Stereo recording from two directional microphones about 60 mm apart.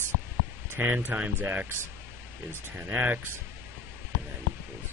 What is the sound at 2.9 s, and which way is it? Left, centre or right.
Speech, right.